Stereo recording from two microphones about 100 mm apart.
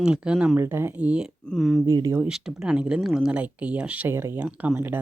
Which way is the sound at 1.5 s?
Centre (ahead or behind).